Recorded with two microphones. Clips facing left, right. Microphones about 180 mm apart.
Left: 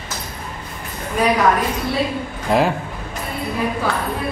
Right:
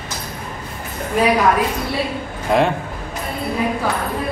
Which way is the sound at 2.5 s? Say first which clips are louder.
Right 1 dB; centre (ahead or behind).